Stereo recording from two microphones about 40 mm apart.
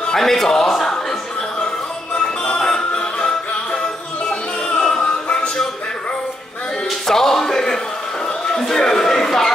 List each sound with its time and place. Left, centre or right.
0.0 s a sound: centre
2.1 s music: left
7.1 s music: centre